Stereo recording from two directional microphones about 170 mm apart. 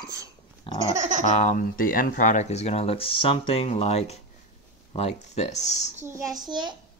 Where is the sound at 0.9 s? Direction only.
45° right (ahead or behind).